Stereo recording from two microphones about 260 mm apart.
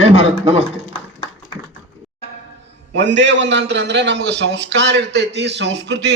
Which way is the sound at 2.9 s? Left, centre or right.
Right.